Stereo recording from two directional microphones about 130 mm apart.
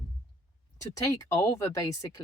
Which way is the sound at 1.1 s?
25° left (ahead or behind).